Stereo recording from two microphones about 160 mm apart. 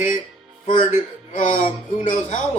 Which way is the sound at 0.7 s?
50° left (ahead or behind).